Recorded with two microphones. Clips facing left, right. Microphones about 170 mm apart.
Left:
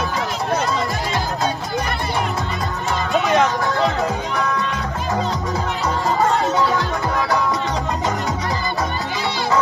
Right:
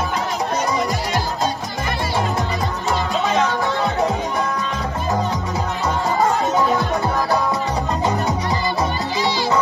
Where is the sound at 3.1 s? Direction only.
65° left (ahead or behind).